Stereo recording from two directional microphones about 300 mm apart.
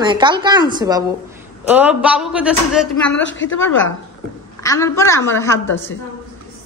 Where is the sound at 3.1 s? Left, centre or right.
Left.